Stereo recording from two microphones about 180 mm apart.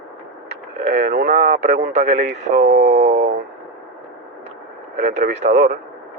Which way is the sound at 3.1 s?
65° right (ahead or behind).